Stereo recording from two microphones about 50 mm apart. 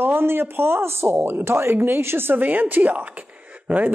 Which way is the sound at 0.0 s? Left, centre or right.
Right.